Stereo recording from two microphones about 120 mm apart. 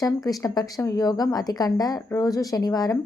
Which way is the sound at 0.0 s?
30° left (ahead or behind).